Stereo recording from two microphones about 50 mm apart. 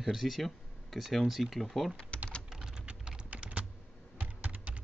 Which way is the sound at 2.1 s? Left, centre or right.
Left.